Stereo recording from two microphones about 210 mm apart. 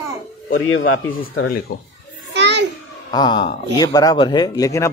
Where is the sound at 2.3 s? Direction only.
55° right (ahead or behind).